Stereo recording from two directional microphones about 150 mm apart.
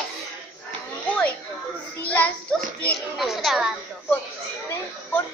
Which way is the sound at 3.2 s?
Centre (ahead or behind).